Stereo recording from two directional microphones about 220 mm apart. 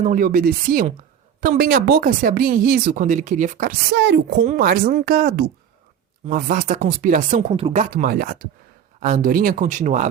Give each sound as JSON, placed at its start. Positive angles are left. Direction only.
{"t": 0.0, "sound": "speech", "side_deg": -40}
{"t": 3.9, "sound": "speech", "side_deg": -50}
{"t": 4.4, "sound": "speech", "side_deg": -40}
{"t": 6.2, "sound": "speech", "side_deg": -35}